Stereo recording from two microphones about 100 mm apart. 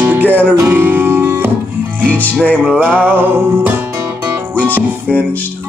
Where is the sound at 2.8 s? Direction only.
15° right (ahead or behind).